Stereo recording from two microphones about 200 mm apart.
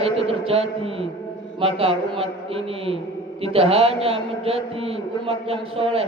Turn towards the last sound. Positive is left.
turn(degrees=-30)  # may be behind; listen again after turning